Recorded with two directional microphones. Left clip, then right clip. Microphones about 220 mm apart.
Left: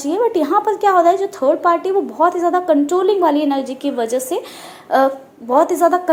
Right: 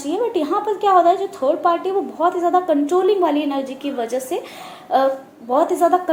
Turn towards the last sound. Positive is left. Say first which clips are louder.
# left 2 dB
turn(degrees=35)  # may be behind; listen again after turning